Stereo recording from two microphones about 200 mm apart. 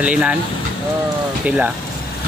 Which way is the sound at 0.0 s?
5° right (ahead or behind).